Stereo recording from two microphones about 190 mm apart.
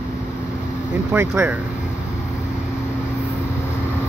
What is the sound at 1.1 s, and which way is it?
Speech, 10° right (ahead or behind).